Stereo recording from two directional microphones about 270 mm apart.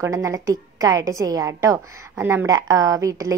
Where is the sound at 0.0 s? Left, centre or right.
Centre.